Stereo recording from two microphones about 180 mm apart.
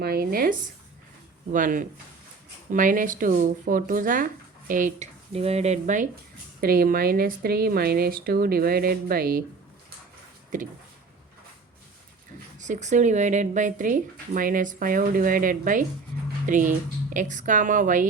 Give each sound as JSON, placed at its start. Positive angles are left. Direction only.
{"t": 0.0, "sound": "speech", "side_deg": -60}
{"t": 1.5, "sound": "speech", "side_deg": -45}
{"t": 6.6, "sound": "speech", "side_deg": -55}
{"t": 10.5, "sound": "speech", "side_deg": -45}
{"t": 12.5, "sound": "speech", "side_deg": -45}